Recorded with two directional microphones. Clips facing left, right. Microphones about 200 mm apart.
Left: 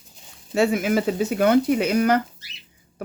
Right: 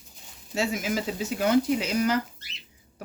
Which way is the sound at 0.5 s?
60° left (ahead or behind).